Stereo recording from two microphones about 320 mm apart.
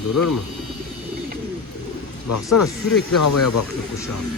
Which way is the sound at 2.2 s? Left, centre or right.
Left.